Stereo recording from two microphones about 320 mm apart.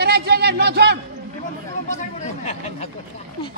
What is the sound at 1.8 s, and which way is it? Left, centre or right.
Speech, left.